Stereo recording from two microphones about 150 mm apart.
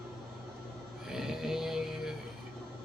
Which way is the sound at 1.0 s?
Centre (ahead or behind).